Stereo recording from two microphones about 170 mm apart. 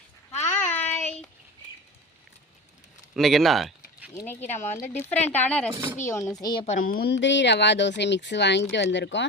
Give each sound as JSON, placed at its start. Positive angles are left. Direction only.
{"t": 0.3, "sound": "child singing", "side_deg": 10}
{"t": 3.2, "sound": "a sound", "side_deg": 0}
{"t": 4.5, "sound": "speech", "side_deg": 15}
{"t": 5.7, "sound": "speech", "side_deg": -15}
{"t": 6.0, "sound": "a woman's voice", "side_deg": 15}
{"t": 6.7, "sound": "speech", "side_deg": 55}